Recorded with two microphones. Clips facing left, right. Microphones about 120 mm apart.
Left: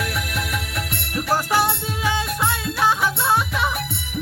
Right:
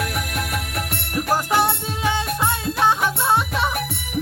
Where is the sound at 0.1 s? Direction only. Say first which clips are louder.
Right 1 dB; 45° right (ahead or behind).